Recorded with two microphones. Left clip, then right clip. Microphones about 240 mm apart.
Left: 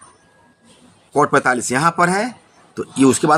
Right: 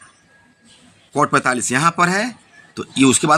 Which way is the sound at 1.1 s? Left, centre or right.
Centre.